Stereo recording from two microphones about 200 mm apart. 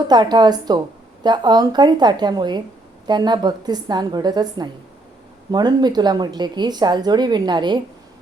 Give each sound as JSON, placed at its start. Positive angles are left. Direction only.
{"t": 0.1, "sound": "speech", "side_deg": -20}